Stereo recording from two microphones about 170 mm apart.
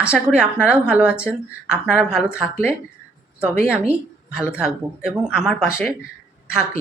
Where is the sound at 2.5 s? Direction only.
15° left (ahead or behind).